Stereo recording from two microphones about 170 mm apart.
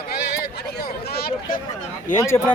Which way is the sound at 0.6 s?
75° left (ahead or behind).